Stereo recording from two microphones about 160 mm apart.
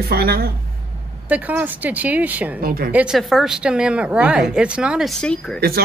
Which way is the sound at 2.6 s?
65° right (ahead or behind).